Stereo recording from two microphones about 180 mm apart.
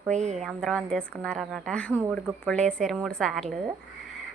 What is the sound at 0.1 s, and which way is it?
Speech, 40° right (ahead or behind).